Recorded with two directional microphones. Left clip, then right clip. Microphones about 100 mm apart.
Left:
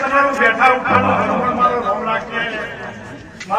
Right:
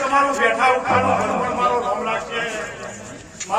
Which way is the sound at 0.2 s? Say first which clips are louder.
Left 5 dB; 30° right (ahead or behind).